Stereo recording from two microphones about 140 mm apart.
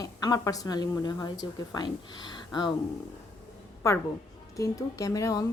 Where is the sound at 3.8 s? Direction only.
20° left (ahead or behind).